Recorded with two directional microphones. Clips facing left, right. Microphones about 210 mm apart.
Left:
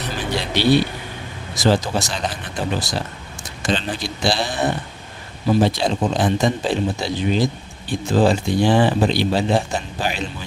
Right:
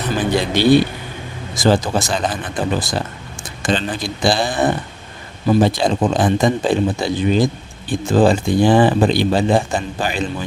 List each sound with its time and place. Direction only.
0.2 s speech: 50° right (ahead or behind)